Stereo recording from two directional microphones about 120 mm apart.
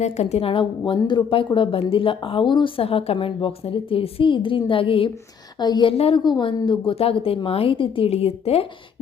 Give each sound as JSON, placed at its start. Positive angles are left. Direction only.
{"t": 0.0, "sound": "a woman's voice", "side_deg": 65}
{"t": 5.5, "sound": "speech", "side_deg": 35}
{"t": 5.9, "sound": "a woman's voice", "side_deg": 55}
{"t": 6.2, "sound": "a woman's voice", "side_deg": 40}